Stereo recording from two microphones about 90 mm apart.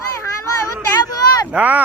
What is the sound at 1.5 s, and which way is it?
Speech, 15° right (ahead or behind).